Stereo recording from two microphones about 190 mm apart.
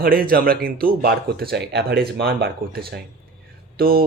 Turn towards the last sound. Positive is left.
turn(degrees=-55)  # may be behind; listen again after turning